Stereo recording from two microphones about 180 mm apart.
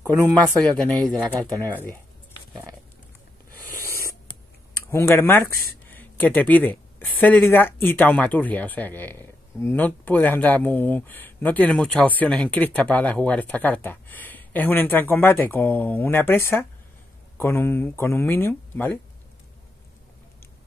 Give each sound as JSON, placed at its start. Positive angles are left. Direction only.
{"t": 0.0, "sound": "speech", "side_deg": -20}
{"t": 0.7, "sound": "speech", "side_deg": 5}
{"t": 4.9, "sound": "speech", "side_deg": 15}